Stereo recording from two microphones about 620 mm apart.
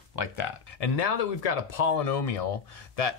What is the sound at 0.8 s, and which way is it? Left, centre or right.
Speech, left.